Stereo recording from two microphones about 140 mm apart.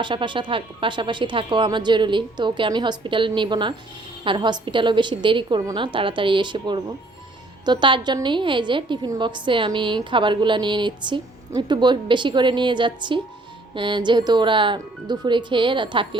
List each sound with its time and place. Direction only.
0.0 s a woman's voice: 35° right (ahead or behind)